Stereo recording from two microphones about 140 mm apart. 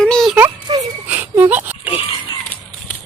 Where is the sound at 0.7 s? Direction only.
40° right (ahead or behind).